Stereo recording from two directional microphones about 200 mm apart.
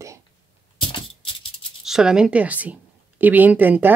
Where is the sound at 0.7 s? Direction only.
25° left (ahead or behind).